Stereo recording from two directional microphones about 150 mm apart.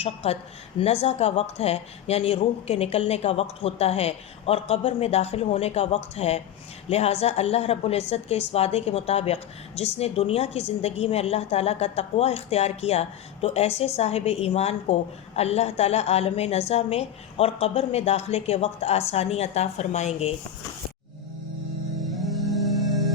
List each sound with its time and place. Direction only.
0.0 s a woman's voice: 45° left (ahead or behind)
22.0 s music: centre (ahead or behind)